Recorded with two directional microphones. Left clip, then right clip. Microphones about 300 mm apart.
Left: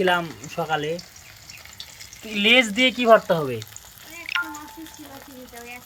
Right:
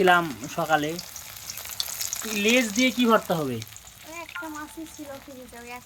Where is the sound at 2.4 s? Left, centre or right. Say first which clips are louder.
Left 5 dB; centre.